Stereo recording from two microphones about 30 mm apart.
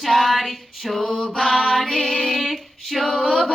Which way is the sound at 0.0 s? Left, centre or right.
Centre.